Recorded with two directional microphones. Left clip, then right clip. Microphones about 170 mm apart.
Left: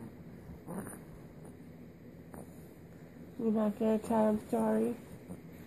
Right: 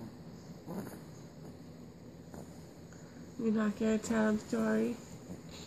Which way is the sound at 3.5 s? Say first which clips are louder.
Left 2 dB; 25° right (ahead or behind).